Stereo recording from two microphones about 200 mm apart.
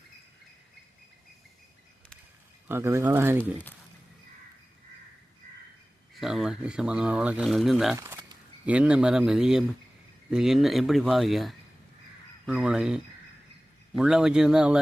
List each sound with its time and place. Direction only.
2.6 s speech: 10° right (ahead or behind)
6.1 s speech: centre (ahead or behind)
7.9 s speech: 15° right (ahead or behind)